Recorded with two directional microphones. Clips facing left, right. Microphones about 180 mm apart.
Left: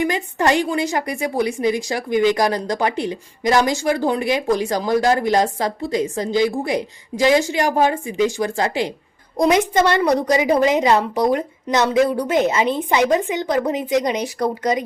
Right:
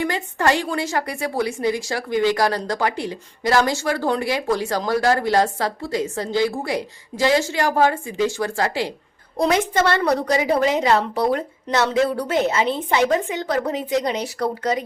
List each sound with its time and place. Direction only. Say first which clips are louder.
0.0 s a woman's voice: left 2 dB; 15° left (ahead or behind)